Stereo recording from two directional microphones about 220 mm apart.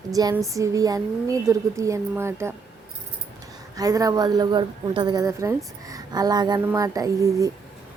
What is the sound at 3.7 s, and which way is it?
A woman's voice, 15° right (ahead or behind).